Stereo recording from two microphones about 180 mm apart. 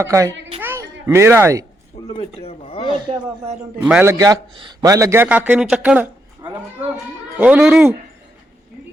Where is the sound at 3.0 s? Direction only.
25° right (ahead or behind).